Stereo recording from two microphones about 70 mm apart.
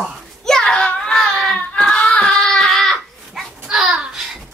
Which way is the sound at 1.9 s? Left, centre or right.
Centre.